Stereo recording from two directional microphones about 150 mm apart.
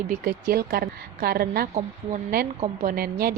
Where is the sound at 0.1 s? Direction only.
85° right.